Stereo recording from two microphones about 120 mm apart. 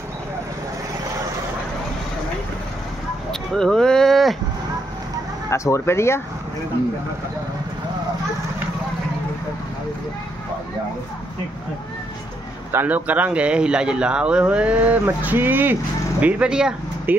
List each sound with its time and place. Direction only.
3.3 s a sound: 5° left (ahead or behind)
5.5 s speech: 25° left (ahead or behind)
12.7 s speech: 15° right (ahead or behind)